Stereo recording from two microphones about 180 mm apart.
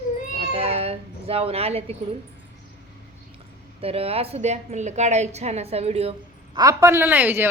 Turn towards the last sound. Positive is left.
turn(degrees=-10)  # may be behind; listen again after turning